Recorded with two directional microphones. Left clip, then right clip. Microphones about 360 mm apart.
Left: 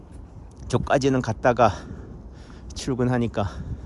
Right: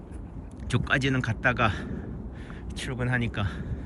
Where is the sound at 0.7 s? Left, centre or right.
Centre.